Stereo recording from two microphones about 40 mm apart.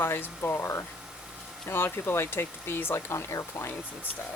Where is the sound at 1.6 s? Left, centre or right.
Left.